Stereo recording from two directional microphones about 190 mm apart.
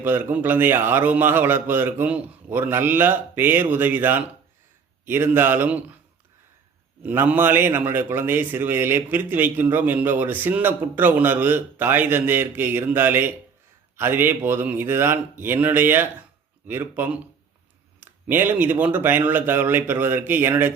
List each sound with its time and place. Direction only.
0.0 s a man's voice: 10° right (ahead or behind)
7.0 s a man's voice: 10° right (ahead or behind)